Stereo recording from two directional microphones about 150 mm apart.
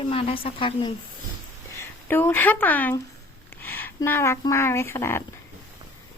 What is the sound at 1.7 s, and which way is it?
Speech, 15° left (ahead or behind).